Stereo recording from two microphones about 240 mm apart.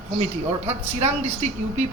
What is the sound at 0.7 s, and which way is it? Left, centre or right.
Speech, right.